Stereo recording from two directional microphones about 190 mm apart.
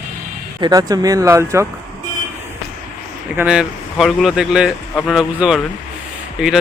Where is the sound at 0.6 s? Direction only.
20° right (ahead or behind).